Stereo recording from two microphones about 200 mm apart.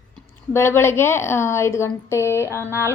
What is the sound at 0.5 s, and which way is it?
A woman's voice, 10° left (ahead or behind).